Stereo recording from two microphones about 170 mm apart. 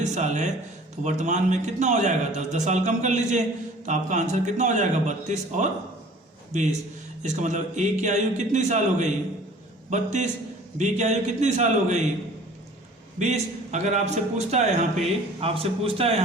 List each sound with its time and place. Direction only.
0.0 s a man's voice: 45° right (ahead or behind)
7.2 s a man's voice: 45° right (ahead or behind)
13.1 s a man's voice: 40° right (ahead or behind)